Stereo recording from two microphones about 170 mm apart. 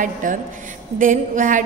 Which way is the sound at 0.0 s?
50° right (ahead or behind).